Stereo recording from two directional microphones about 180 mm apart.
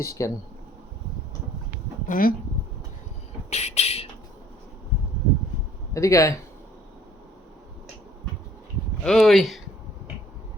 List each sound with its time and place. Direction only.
0.0 s speech: 15° left (ahead or behind)
2.0 s speech: 50° left (ahead or behind)
3.5 s a sound: 35° left (ahead or behind)
5.9 s speech: 15° left (ahead or behind)
9.0 s speech: centre (ahead or behind)